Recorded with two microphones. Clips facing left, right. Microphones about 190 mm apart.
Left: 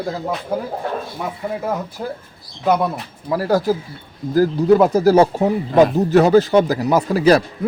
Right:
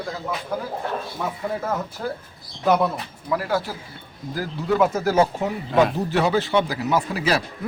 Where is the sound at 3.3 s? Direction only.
40° left (ahead or behind).